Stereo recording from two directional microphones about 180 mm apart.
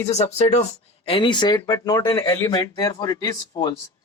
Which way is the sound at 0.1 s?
35° left (ahead or behind).